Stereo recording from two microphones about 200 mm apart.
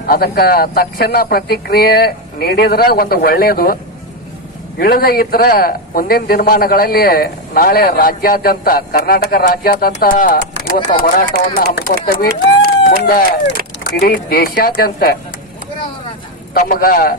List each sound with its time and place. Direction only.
0.0 s a man's voice: 50° left (ahead or behind)
4.7 s a man's voice: 50° left (ahead or behind)
16.5 s a man's voice: 45° left (ahead or behind)